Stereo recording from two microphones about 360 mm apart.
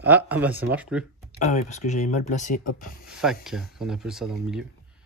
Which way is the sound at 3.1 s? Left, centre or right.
Centre.